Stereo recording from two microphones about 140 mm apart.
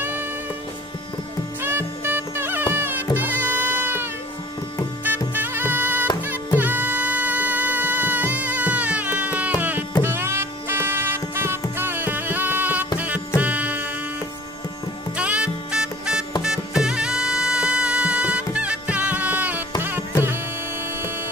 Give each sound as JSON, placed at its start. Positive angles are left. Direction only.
{"t": 1.6, "sound": "music", "side_deg": -15}
{"t": 15.1, "sound": "music", "side_deg": -10}